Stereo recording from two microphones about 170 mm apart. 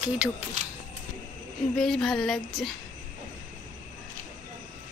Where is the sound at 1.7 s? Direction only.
5° left (ahead or behind).